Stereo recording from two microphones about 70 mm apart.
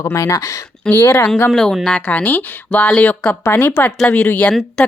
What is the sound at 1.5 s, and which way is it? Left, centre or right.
Speech, centre.